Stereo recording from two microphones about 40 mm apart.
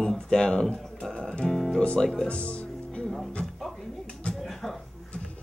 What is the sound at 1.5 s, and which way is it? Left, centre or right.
Music, centre.